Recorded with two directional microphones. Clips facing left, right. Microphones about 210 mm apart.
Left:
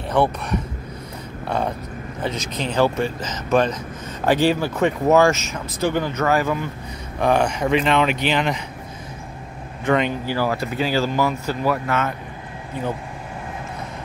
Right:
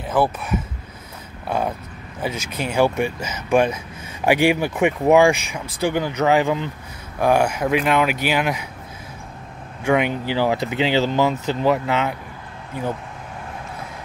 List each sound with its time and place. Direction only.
0.1 s speech: 5° right (ahead or behind)
2.2 s speech: 10° right (ahead or behind)
7.2 s speech: 5° right (ahead or behind)
9.8 s speech: 10° right (ahead or behind)